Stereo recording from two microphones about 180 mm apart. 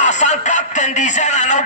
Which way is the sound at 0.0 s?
40° left (ahead or behind).